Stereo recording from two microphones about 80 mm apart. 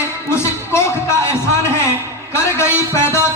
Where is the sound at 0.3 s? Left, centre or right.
Left.